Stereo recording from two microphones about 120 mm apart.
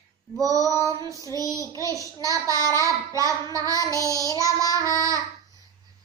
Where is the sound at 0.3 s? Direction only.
30° right (ahead or behind).